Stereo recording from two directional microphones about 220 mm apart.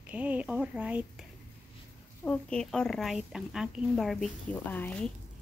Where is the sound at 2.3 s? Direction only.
5° left (ahead or behind).